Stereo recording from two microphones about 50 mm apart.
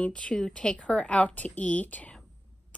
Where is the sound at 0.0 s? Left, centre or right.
Left.